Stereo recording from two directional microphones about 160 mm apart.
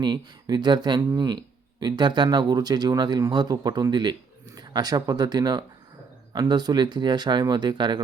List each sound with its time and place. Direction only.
0.0 s speech: 25° right (ahead or behind)